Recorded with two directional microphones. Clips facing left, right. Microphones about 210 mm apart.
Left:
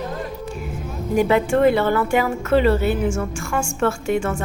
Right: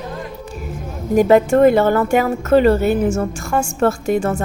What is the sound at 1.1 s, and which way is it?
A woman's voice, 45° right (ahead or behind).